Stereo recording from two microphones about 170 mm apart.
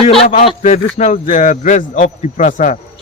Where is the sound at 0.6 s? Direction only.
45° left (ahead or behind).